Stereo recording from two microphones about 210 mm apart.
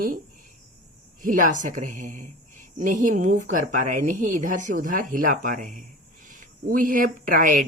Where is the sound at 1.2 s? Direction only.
40° right (ahead or behind).